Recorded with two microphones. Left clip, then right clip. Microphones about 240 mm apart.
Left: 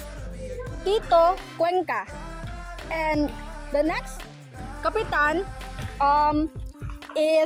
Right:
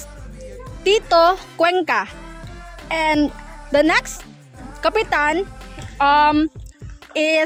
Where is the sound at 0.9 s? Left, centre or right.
Right.